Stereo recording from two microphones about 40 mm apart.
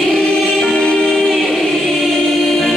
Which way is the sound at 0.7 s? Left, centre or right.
Left.